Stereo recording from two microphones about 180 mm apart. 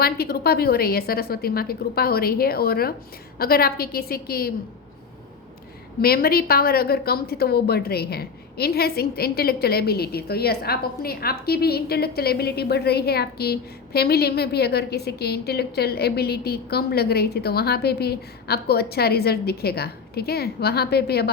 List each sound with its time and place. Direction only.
0.0 s a woman's voice: 60° left (ahead or behind)
6.0 s a woman's voice: 55° left (ahead or behind)